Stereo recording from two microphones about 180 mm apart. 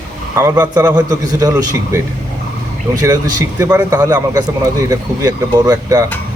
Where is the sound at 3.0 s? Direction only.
20° right (ahead or behind).